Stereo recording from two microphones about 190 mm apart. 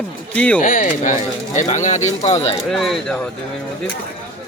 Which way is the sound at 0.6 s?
45° left (ahead or behind).